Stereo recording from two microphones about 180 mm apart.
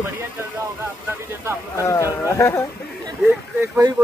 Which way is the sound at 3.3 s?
15° right (ahead or behind).